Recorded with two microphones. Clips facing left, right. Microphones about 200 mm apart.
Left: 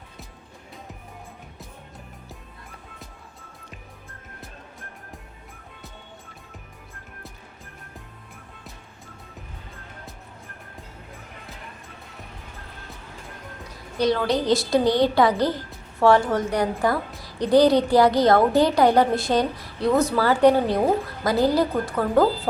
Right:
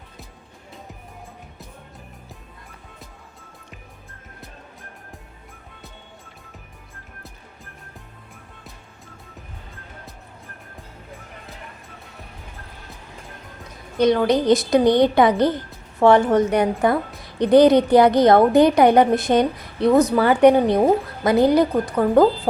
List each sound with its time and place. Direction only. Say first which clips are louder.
13.7 s a woman's voice: right 5 dB; 20° right (ahead or behind)